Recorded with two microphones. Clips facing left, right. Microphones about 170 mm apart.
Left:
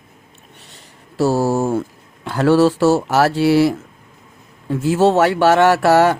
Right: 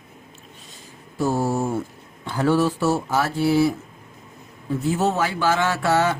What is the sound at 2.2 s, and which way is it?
Speech, 85° left.